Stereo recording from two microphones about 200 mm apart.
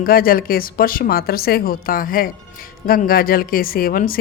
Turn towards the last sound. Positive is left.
turn(degrees=45)  # may be behind; listen again after turning